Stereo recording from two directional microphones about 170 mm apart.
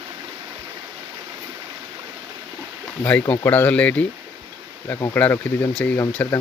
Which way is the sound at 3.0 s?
10° left (ahead or behind).